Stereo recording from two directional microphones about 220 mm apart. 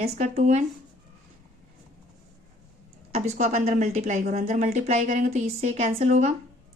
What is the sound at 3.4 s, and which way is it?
Speech, 30° right (ahead or behind).